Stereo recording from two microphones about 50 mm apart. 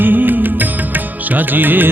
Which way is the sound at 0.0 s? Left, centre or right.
Right.